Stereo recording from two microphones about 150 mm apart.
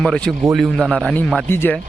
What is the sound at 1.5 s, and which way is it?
Speech, 15° left (ahead or behind).